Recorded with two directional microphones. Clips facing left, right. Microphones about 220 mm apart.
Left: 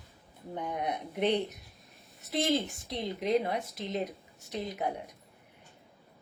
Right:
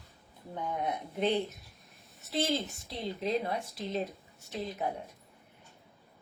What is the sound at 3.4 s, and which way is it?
Speech, 20° left (ahead or behind).